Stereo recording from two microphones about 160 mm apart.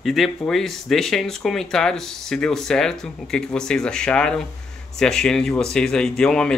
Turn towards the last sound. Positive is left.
turn(degrees=5)  # may be behind; listen again after turning